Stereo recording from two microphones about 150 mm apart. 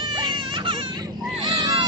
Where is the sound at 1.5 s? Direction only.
35° right (ahead or behind).